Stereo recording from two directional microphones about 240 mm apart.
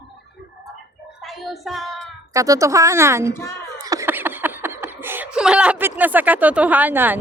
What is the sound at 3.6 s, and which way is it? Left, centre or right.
Laughter, centre.